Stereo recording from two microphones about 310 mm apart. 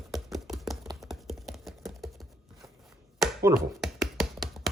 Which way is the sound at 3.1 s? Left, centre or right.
Centre.